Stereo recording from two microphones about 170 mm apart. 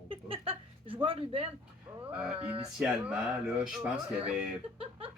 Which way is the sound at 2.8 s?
5° right (ahead or behind).